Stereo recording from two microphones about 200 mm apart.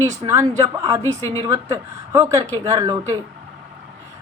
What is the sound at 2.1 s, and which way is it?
A woman's voice, 15° right (ahead or behind).